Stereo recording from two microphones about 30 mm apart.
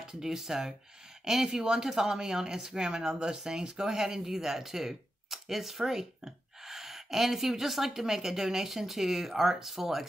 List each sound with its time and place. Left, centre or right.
0.0 s speech: centre